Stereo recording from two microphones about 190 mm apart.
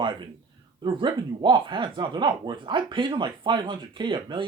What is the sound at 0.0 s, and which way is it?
Speech, 25° right (ahead or behind).